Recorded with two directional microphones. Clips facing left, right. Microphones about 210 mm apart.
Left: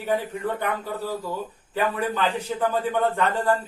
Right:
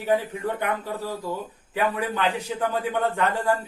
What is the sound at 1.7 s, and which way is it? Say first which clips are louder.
A man's voice: even; 15° right (ahead or behind).